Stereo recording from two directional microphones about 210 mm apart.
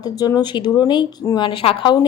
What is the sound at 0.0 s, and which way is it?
Speech, 20° left (ahead or behind).